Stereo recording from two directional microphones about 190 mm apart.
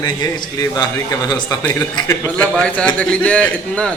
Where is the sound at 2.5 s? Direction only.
5° left (ahead or behind).